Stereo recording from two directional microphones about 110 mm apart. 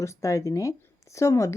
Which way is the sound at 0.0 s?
30° left (ahead or behind).